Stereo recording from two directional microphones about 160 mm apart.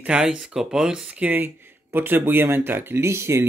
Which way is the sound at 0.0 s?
5° right (ahead or behind).